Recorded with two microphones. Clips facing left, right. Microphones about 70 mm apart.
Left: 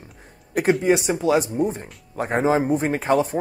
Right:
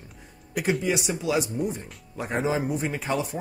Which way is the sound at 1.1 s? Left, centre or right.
Left.